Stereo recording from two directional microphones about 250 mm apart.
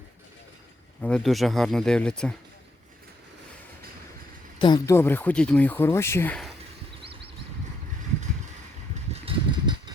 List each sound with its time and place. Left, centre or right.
1.0 s speech: centre
4.6 s speech: centre
9.1 s a sound: right